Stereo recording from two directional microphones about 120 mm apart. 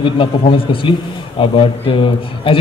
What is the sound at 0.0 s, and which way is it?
A man's voice, 45° left (ahead or behind).